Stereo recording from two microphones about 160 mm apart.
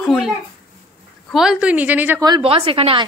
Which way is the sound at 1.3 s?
5° right (ahead or behind).